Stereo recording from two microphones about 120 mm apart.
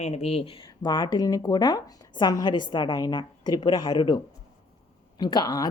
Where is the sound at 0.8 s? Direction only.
35° left (ahead or behind).